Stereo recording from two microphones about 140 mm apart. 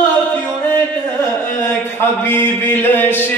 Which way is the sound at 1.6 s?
15° left (ahead or behind).